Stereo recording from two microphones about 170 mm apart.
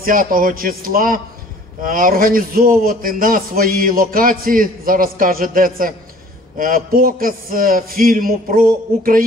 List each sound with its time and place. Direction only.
0.0 s a man's voice: 55° right (ahead or behind)